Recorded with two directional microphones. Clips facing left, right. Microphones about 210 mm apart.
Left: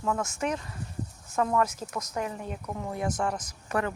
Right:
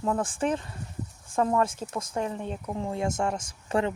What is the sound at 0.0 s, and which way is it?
Speech, 30° right (ahead or behind).